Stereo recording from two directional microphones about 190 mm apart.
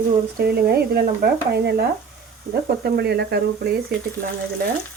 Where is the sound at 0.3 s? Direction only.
55° right (ahead or behind).